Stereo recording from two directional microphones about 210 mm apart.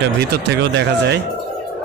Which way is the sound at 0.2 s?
50° right (ahead or behind).